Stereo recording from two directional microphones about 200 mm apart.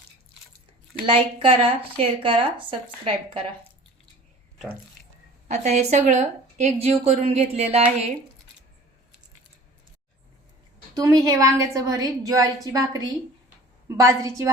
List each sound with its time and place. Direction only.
1.0 s speech: 25° right (ahead or behind)
4.5 s speech: centre (ahead or behind)
5.5 s speech: 35° right (ahead or behind)
10.9 s a woman's voice: 20° right (ahead or behind)